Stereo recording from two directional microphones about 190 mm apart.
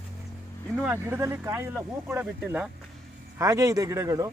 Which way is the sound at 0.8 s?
10° right (ahead or behind).